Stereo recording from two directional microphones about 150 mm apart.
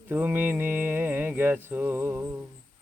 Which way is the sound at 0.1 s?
10° right (ahead or behind).